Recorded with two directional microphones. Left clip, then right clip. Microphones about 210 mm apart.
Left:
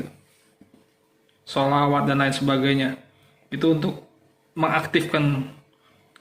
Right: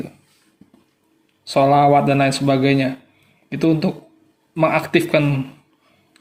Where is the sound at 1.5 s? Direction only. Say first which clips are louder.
Right 7 dB; 35° right (ahead or behind).